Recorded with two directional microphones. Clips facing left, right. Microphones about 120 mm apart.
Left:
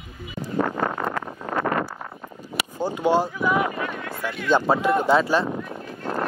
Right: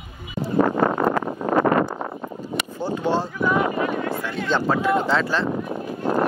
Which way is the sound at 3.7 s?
30° right (ahead or behind).